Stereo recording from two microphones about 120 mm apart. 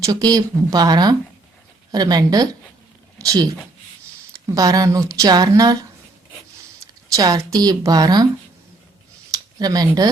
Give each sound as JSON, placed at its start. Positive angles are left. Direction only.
{"t": 0.0, "sound": "speech", "side_deg": -30}
{"t": 7.1, "sound": "speech", "side_deg": -30}
{"t": 9.3, "sound": "a sound", "side_deg": -35}